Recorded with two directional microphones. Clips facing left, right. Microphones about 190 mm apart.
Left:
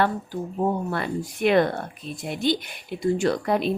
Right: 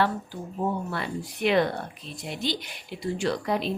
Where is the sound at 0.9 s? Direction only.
50° left (ahead or behind).